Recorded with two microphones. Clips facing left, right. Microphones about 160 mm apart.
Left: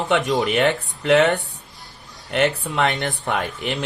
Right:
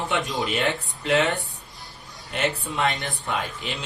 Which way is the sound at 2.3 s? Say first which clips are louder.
Left 6 dB; 70° left (ahead or behind).